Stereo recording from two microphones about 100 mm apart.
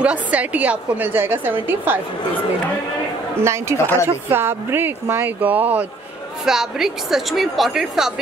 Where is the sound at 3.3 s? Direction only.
30° right (ahead or behind).